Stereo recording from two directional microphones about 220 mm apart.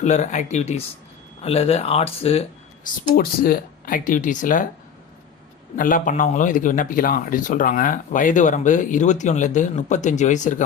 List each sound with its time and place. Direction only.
0.0 s speech: 30° left (ahead or behind)
3.2 s speech: 40° left (ahead or behind)
5.7 s speech: 40° left (ahead or behind)